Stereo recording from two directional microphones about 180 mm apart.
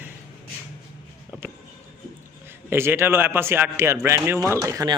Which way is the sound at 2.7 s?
15° right (ahead or behind).